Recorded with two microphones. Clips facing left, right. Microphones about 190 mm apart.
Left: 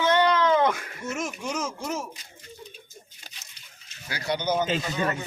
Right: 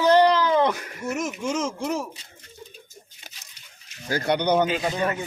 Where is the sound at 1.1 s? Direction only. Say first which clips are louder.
Right 4 dB; 20° right (ahead or behind).